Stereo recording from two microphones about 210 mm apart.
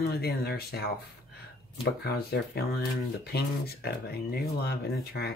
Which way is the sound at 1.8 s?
50° left (ahead or behind).